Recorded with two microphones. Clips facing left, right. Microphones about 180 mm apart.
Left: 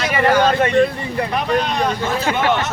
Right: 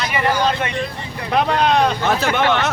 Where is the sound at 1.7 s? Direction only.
75° right (ahead or behind).